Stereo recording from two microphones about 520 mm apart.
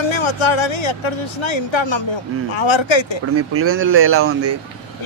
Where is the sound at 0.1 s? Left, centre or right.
Left.